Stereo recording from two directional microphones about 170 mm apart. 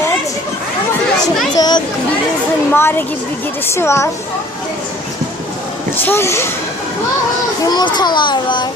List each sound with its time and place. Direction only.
1.5 s children playing: 25° left (ahead or behind)
2.7 s speech: 15° left (ahead or behind)
6.0 s speech: 15° left (ahead or behind)
7.6 s a child's voice: 25° left (ahead or behind)